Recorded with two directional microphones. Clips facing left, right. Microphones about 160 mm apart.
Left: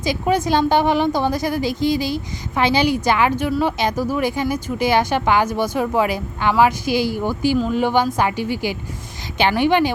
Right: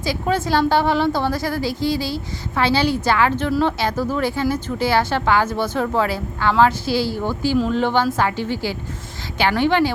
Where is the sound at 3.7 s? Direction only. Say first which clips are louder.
Left 1 dB; 15° left (ahead or behind).